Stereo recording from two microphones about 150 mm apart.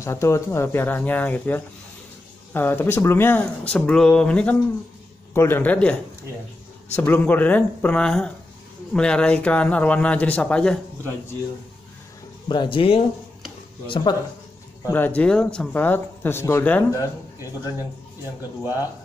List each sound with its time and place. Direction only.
0.0 s speech: 20° left (ahead or behind)
7.0 s speech: 10° left (ahead or behind)
12.4 s speech: 35° left (ahead or behind)
14.9 s speech: 10° left (ahead or behind)